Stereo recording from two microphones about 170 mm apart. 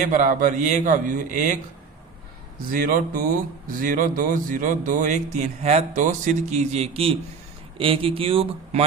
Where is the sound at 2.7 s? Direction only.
55° right (ahead or behind).